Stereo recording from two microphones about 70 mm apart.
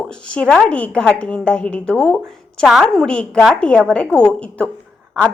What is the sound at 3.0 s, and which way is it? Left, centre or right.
A woman's voice, centre.